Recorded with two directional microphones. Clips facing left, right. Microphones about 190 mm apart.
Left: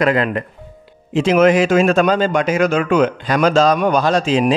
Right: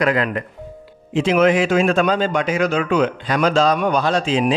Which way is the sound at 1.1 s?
45° left (ahead or behind).